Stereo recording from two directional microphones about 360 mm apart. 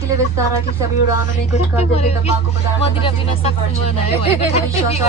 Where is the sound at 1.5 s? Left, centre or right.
Centre.